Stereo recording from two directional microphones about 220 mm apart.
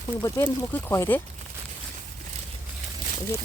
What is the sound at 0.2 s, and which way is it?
Speech, 15° left (ahead or behind).